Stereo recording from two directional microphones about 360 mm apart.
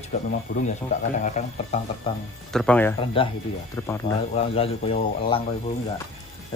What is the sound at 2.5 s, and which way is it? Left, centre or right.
Speech, centre.